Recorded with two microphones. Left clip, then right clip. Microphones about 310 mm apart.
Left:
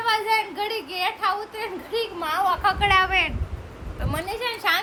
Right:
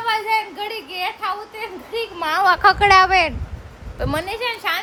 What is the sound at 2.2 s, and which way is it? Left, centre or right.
A child's voice, right.